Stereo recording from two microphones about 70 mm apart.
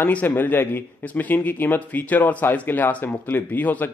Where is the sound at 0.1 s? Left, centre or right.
Left.